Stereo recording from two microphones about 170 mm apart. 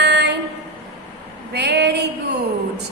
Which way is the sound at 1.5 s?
75° right (ahead or behind).